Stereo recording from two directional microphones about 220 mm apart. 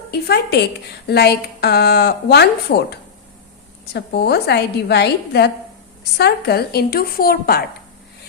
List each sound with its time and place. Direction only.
0.1 s a woman's voice: 45° left (ahead or behind)